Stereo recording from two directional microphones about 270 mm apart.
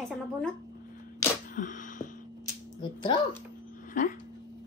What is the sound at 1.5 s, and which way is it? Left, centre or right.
Sneeze, left.